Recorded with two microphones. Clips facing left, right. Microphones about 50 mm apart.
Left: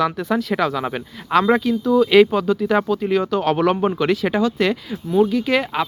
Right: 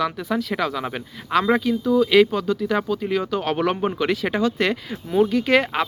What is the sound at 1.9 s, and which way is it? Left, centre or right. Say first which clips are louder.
Speech: left 3 dB; centre.